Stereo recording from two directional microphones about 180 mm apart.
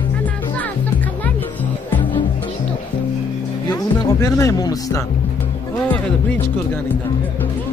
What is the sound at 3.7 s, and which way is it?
Music, 20° left (ahead or behind).